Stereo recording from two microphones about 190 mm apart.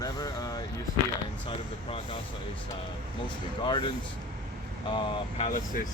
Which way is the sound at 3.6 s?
25° left (ahead or behind).